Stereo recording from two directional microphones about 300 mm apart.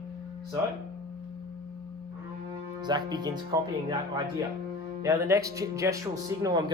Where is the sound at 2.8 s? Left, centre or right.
Centre.